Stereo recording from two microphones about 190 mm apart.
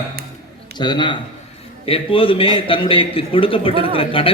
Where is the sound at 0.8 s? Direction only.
25° left (ahead or behind).